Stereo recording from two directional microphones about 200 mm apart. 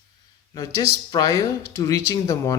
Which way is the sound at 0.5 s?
20° left (ahead or behind).